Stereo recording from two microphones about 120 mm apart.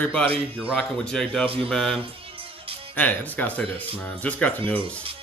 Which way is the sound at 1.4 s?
50° right (ahead or behind).